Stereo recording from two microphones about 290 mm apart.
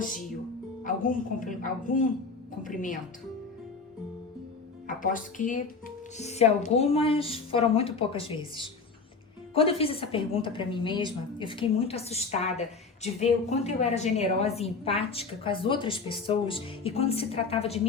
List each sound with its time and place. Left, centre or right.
0.9 s a woman's voice: left
4.9 s a woman's voice: left